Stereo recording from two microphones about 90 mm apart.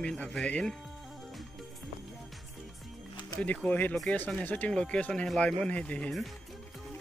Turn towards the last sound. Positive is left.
turn(degrees=5)  # may be behind; listen again after turning